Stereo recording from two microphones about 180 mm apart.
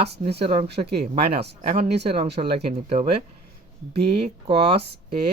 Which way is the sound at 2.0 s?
35° right (ahead or behind).